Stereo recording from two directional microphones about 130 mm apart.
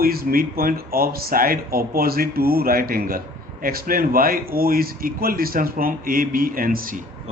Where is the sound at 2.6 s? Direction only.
90° right.